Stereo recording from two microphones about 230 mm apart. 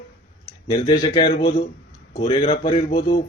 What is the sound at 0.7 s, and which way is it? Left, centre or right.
Speech, left.